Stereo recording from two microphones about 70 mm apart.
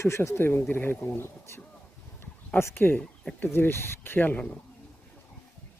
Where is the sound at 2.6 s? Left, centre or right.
Left.